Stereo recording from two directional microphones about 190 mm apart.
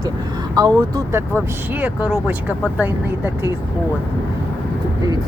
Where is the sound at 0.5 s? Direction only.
20° right (ahead or behind).